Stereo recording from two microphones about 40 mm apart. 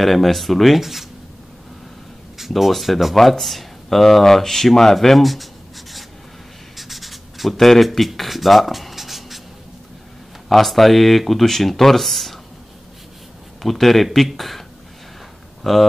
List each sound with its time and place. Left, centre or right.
0.0 s speech: centre
2.3 s speech: centre
6.8 s writing: centre
10.5 s speech: centre
13.6 s speech: centre
15.7 s speech: centre